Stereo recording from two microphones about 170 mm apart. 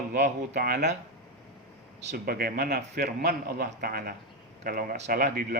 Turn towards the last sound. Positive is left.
turn(degrees=-55)  # may be behind; listen again after turning